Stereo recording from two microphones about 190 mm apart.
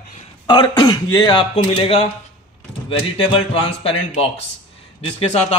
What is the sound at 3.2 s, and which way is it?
Speech, 30° left (ahead or behind).